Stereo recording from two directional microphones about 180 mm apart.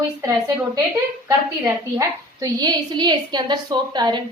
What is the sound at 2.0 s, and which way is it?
A woman's voice, 20° right (ahead or behind).